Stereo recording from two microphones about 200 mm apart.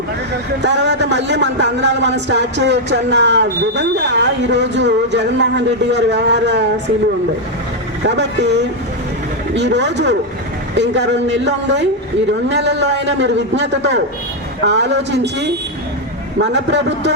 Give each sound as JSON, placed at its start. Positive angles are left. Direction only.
{"t": 0.6, "sound": "speech", "side_deg": -60}
{"t": 8.0, "sound": "speech", "side_deg": -60}